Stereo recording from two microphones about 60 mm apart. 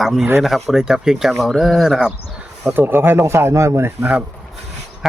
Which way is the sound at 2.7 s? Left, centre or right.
Right.